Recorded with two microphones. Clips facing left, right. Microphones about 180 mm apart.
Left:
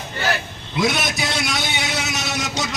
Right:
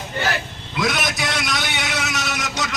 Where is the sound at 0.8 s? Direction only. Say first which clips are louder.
Left 2 dB; 25° left (ahead or behind).